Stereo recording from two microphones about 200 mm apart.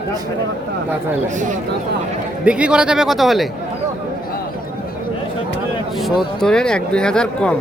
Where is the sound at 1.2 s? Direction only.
40° right (ahead or behind).